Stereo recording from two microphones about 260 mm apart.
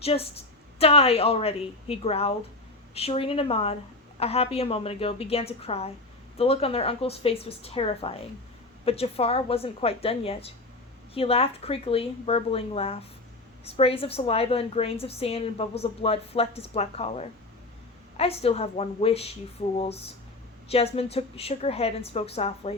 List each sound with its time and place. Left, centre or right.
0.0 s a woman's voice: left